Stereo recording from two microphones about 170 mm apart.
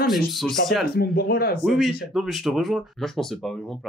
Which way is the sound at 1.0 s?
65° left (ahead or behind).